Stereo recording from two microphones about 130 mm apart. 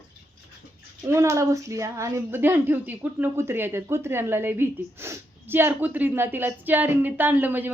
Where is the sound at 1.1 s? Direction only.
20° right (ahead or behind).